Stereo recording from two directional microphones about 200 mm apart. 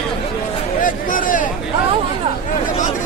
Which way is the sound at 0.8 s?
40° left (ahead or behind).